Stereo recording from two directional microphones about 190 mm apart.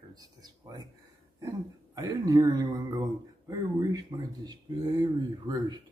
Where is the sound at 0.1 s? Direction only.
20° right (ahead or behind).